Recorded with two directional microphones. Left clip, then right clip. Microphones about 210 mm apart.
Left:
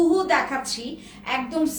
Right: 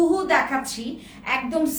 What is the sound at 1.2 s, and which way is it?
Speech, 10° right (ahead or behind).